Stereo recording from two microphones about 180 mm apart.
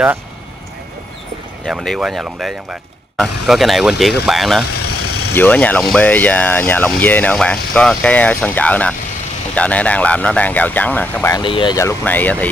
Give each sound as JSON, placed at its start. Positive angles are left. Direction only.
{"t": 1.7, "sound": "speech", "side_deg": 0}
{"t": 5.3, "sound": "speech", "side_deg": 10}
{"t": 11.3, "sound": "speech", "side_deg": 25}